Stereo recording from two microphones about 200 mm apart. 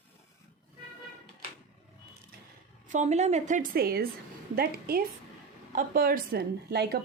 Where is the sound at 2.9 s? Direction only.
35° right (ahead or behind); by 7.0 s 55° right (ahead or behind).